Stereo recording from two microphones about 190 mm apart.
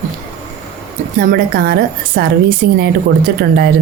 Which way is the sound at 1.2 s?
50° right (ahead or behind).